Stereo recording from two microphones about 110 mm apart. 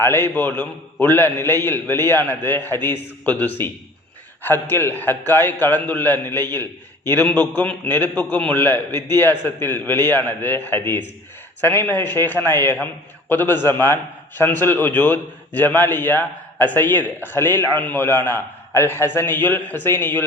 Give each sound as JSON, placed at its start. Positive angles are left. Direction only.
{"t": 0.0, "sound": "a man's voice", "side_deg": 20}